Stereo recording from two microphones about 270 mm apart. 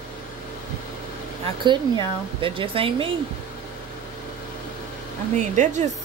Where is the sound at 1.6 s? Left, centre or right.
Centre.